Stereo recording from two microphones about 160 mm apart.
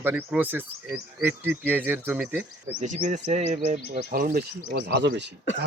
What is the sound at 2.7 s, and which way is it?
Speech, 50° right (ahead or behind).